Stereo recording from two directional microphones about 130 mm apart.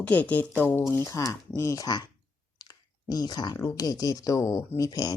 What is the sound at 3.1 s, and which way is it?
Speech, 30° left (ahead or behind).